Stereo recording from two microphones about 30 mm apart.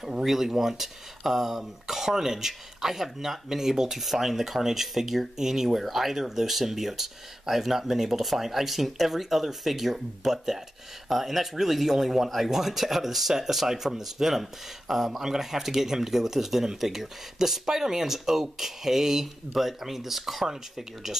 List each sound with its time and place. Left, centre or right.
0.2 s speech: centre
5.8 s speech: centre